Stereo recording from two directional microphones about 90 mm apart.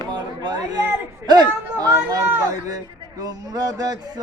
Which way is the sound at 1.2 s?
50° right (ahead or behind).